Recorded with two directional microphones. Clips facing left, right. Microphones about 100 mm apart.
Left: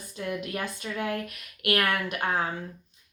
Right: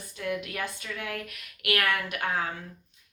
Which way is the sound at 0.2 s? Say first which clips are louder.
Even; 30° left (ahead or behind).